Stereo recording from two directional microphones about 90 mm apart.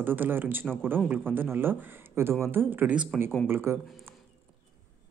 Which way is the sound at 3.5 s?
25° right (ahead or behind).